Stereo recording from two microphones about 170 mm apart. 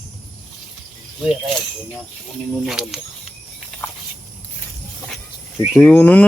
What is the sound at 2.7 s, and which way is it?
Speech, centre (ahead or behind).